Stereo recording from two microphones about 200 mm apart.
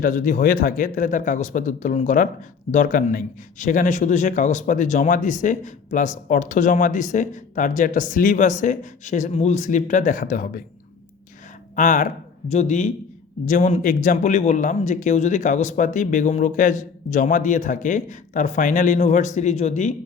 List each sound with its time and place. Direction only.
0.0 s a man's voice: 45° left (ahead or behind)
11.8 s a man's voice: 40° left (ahead or behind)